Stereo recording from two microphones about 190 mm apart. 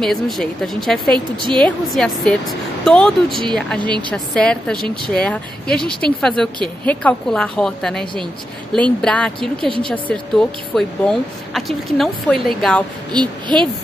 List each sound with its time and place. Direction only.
0.0 s speech: centre (ahead or behind)
1.1 s speech: 25° right (ahead or behind)
1.6 s speech: centre (ahead or behind)
3.3 s speech: 25° right (ahead or behind)
3.5 s speech: 5° left (ahead or behind)
3.8 s speech: 25° right (ahead or behind)
4.1 s a woman's voice: 5° left (ahead or behind)
13.1 s speech: 25° right (ahead or behind)